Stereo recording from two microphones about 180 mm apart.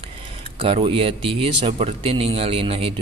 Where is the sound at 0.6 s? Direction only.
30° right (ahead or behind).